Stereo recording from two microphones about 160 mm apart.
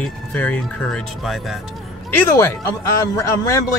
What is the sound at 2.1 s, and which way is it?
A man's voice, 15° left (ahead or behind).